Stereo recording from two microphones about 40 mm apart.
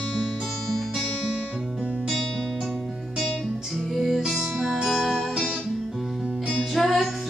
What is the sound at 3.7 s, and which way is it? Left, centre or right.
Music, centre.